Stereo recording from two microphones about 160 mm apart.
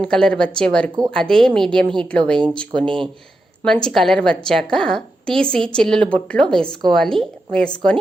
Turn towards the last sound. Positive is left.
turn(degrees=5)  # may be behind; listen again after turning